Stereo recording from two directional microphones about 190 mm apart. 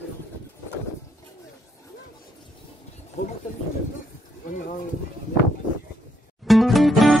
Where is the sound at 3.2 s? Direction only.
40° left (ahead or behind).